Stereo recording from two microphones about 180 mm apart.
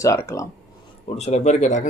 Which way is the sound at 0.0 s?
15° left (ahead or behind).